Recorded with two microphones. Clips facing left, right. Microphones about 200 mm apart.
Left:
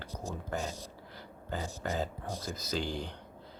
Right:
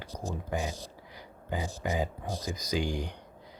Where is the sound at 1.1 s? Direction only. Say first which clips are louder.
Right 3 dB; 15° right (ahead or behind).